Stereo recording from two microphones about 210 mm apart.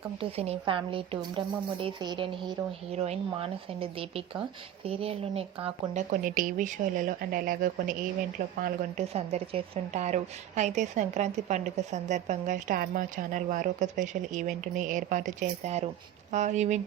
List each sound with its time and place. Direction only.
0.2 s a woman's voice: 30° right (ahead or behind)